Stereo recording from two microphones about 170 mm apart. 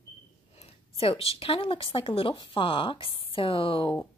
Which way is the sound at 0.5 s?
35° left (ahead or behind).